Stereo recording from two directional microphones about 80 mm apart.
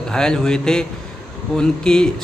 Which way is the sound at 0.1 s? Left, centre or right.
Centre.